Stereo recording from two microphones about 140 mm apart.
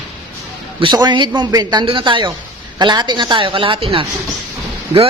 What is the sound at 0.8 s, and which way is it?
Speech, 30° right (ahead or behind).